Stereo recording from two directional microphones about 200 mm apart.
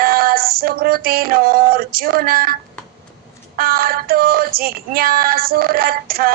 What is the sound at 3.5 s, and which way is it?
Female singing, 45° right (ahead or behind).